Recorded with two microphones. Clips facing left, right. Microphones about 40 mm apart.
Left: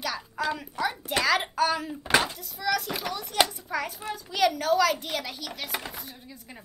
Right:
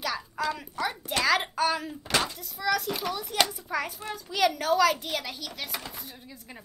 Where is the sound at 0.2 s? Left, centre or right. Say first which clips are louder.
Left 1 dB; centre.